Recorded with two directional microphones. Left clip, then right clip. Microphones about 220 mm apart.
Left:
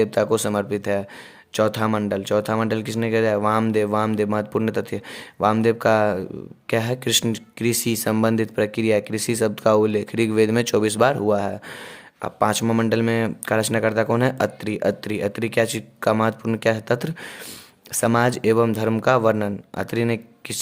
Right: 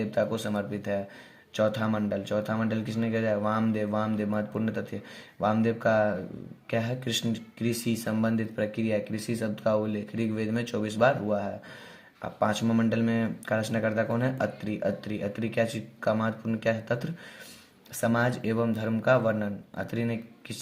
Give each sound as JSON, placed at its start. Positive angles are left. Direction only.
{"t": 0.0, "sound": "speech", "side_deg": 40}